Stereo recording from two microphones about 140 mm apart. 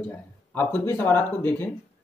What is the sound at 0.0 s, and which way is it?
Speech, 10° left (ahead or behind).